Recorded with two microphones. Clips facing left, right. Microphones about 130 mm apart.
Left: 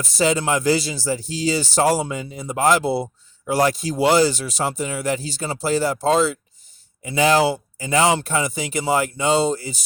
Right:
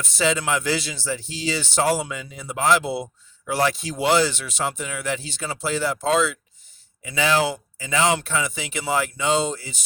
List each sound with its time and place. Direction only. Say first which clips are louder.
0.0 s speech: left 3 dB; 40° left (ahead or behind)